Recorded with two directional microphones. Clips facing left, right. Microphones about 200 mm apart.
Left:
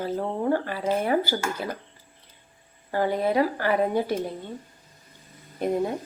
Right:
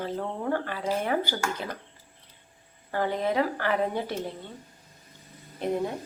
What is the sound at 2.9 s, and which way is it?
A woman's voice, 10° left (ahead or behind).